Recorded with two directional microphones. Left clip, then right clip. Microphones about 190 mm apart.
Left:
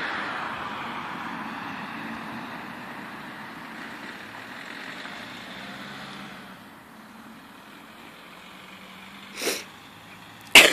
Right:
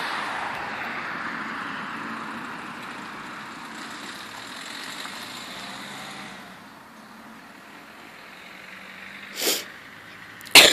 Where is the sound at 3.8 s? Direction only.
35° left (ahead or behind).